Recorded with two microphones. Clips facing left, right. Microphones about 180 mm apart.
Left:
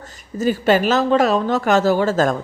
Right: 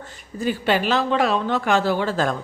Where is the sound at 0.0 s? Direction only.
40° left (ahead or behind).